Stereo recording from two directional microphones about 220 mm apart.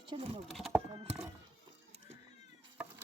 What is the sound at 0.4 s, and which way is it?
Clip-clop, centre (ahead or behind).